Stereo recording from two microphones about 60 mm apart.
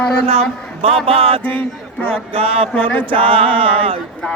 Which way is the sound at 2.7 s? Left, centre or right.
Left.